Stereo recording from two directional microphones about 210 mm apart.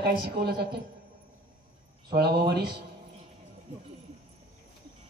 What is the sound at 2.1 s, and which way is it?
Speech, 50° right (ahead or behind).